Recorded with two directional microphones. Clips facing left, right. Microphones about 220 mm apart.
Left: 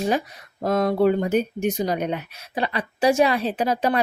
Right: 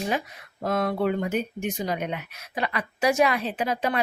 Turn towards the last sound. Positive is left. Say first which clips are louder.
# left 4 dB
turn(degrees=40)  # may be behind; listen again after turning